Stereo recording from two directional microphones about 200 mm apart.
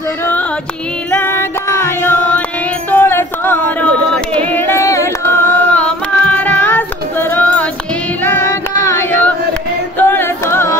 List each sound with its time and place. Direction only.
0.2 s music: 10° left (ahead or behind)
2.9 s a sound: 10° left (ahead or behind)
4.5 s singing: 10° left (ahead or behind)
6.6 s child singing: 10° left (ahead or behind)
8.8 s music: 10° left (ahead or behind)